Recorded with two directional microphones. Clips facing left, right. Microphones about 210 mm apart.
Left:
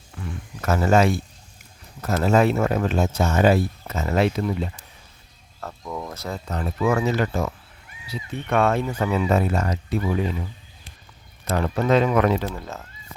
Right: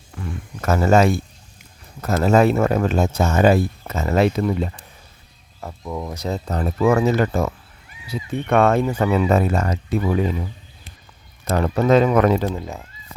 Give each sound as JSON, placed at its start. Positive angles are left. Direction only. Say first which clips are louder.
{"t": 0.6, "sound": "speech", "louder": "right 3 dB", "side_deg": -45}
{"t": 5.5, "sound": "speech", "louder": "right 3 dB", "side_deg": -10}
{"t": 6.5, "sound": "speech", "louder": "right 4 dB", "side_deg": -40}
{"t": 11.4, "sound": "speech", "louder": "right 4 dB", "side_deg": -45}
{"t": 12.5, "sound": "speech", "louder": "right 5 dB", "side_deg": -15}